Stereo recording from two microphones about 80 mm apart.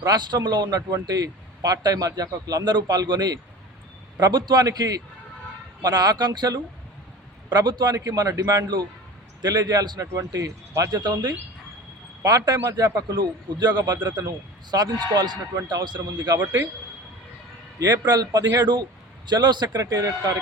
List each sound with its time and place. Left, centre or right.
0.0 s a man's voice: right
10.0 s a man's voice: right
11.0 s speech: right
12.2 s a man's voice: right
13.1 s speech: right
17.7 s speech: right
19.8 s a man's voice: right